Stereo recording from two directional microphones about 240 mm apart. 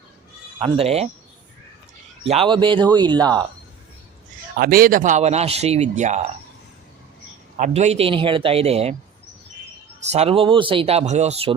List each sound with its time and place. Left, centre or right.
0.6 s speech: right
2.2 s speech: right
4.5 s speech: right
7.5 s speech: right
10.1 s speech: right